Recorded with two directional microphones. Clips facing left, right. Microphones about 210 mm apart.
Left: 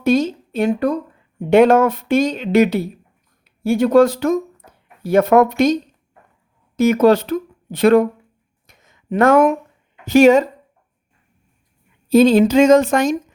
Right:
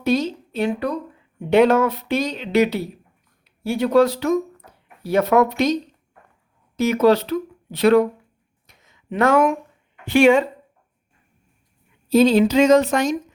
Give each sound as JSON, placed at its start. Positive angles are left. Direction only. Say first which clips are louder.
{"t": 0.0, "sound": "speech", "louder": "left 4 dB", "side_deg": 50}
{"t": 8.6, "sound": "a sound", "louder": "left 4 dB", "side_deg": 50}
{"t": 10.0, "sound": "speech", "louder": "left 4 dB", "side_deg": 40}
{"t": 12.0, "sound": "speech", "louder": "left 3 dB", "side_deg": 50}